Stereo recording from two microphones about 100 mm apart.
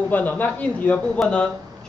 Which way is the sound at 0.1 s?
15° left (ahead or behind).